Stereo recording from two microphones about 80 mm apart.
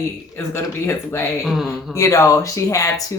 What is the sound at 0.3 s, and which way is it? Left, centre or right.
A woman's voice, left.